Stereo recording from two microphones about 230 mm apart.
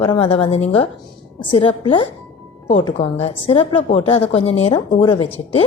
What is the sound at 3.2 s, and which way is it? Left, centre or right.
A woman's voice, left.